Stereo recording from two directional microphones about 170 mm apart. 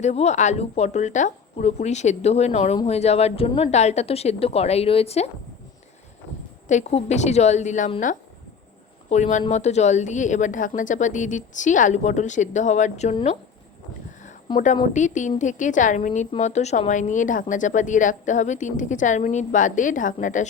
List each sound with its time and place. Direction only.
0.0 s a woman's voice: 40° left (ahead or behind)
6.7 s speech: 45° left (ahead or behind)
14.5 s speech: 45° left (ahead or behind)